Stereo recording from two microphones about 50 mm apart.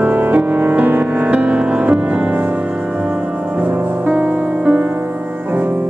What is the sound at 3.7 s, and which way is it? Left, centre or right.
Music, right.